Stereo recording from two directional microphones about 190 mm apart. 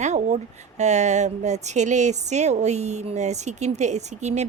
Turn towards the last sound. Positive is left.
turn(degrees=-35)  # may be behind; listen again after turning